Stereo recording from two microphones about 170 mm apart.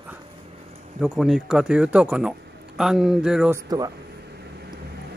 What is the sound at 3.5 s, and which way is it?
Speech, 20° right (ahead or behind).